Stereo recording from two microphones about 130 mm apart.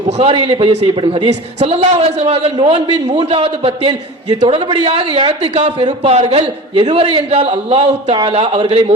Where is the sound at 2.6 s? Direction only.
40° right (ahead or behind).